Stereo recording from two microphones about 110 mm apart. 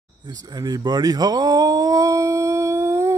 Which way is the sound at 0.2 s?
40° right (ahead or behind).